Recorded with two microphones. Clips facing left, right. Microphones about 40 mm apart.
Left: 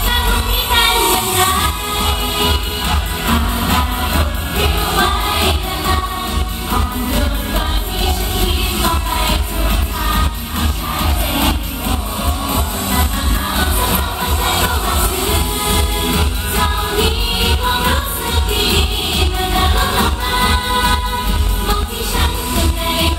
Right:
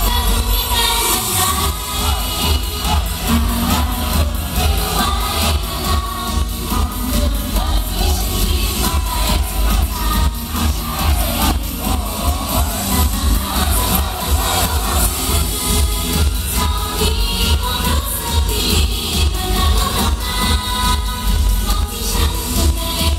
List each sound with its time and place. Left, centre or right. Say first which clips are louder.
0.0 s music: left 3 dB; left